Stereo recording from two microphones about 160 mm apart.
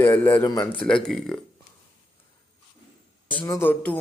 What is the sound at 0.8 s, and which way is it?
Speech, 5° left (ahead or behind).